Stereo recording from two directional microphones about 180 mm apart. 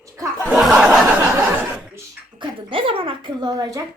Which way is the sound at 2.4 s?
30° right (ahead or behind).